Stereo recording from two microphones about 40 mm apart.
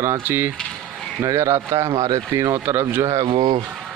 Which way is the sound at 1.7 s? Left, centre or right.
Right.